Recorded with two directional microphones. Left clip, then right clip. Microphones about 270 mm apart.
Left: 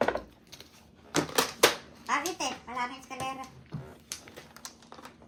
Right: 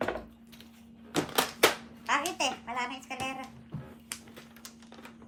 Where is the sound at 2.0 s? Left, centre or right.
Centre.